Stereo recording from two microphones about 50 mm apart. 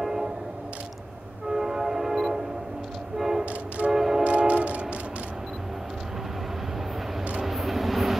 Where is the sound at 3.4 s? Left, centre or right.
Right.